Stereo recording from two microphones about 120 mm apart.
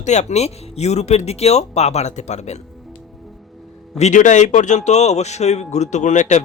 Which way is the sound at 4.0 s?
80° left.